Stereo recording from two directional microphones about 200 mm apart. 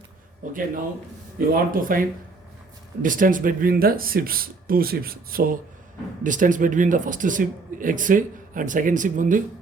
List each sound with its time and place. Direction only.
0.4 s speech: 40° right (ahead or behind)